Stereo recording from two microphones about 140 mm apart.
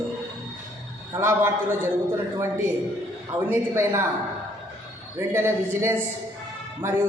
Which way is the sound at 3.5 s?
20° right (ahead or behind).